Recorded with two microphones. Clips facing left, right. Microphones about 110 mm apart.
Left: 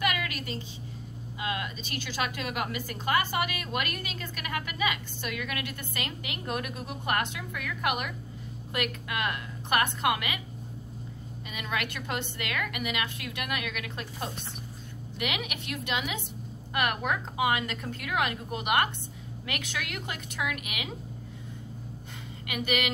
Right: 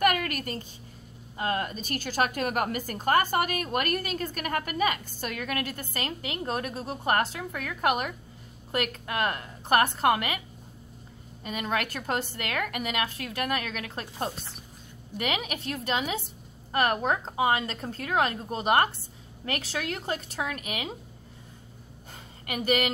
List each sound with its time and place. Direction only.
0.0 s a sound: 50° right (ahead or behind)
1.4 s a woman's voice: 45° right (ahead or behind)
11.4 s a woman's voice: 40° right (ahead or behind)
22.5 s a woman's voice: 40° right (ahead or behind)